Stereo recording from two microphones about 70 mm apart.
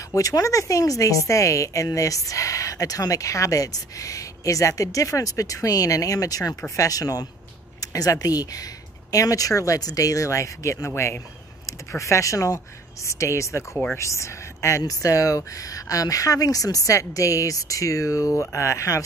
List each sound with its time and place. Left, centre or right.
0.1 s speech: left